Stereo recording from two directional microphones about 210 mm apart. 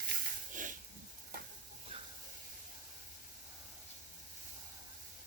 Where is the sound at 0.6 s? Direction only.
40° right (ahead or behind).